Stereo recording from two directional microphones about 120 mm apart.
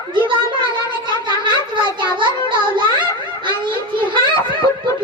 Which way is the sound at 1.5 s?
40° right (ahead or behind).